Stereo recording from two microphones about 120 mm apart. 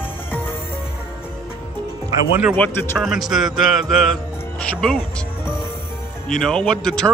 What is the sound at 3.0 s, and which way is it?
Speech, 5° right (ahead or behind).